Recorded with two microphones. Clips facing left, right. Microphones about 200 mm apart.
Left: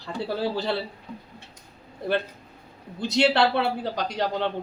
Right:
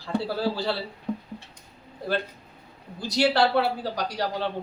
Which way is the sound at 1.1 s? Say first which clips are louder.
Right 9 dB; 60° right (ahead or behind).